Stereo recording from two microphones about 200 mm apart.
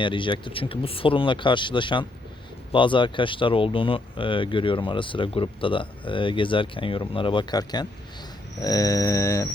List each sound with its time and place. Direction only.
0.0 s speech: 25° left (ahead or behind)
8.6 s mantra: 15° left (ahead or behind)